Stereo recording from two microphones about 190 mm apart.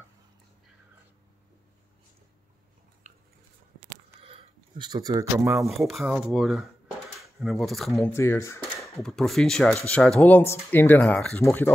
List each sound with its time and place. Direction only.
3.1 s biting: 40° right (ahead or behind)
4.2 s speech: 30° right (ahead or behind)
5.7 s speech: centre (ahead or behind)
7.9 s speech: 15° left (ahead or behind)
9.0 s speech: centre (ahead or behind)